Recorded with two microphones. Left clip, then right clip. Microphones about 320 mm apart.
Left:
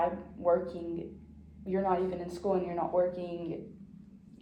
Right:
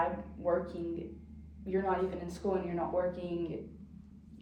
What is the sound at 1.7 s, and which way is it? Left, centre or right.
Speech, centre.